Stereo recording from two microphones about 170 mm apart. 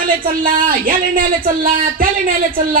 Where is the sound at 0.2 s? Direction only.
55° right (ahead or behind).